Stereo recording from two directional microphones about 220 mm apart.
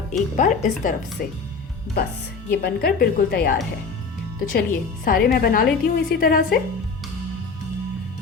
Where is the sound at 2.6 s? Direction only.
45° left (ahead or behind).